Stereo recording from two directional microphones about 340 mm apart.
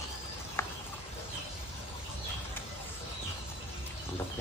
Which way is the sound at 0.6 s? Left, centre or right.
Centre.